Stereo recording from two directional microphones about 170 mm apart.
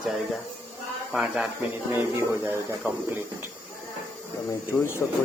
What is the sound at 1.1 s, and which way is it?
Speech, 5° right (ahead or behind).